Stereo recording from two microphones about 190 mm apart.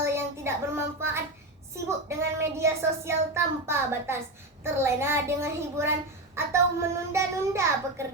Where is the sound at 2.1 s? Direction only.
15° right (ahead or behind).